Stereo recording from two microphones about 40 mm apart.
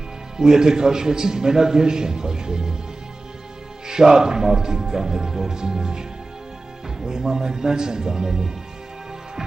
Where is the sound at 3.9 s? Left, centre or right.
Centre.